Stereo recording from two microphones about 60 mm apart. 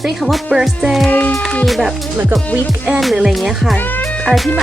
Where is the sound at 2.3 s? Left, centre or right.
Right.